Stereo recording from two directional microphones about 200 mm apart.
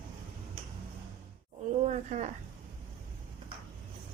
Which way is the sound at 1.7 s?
35° right (ahead or behind).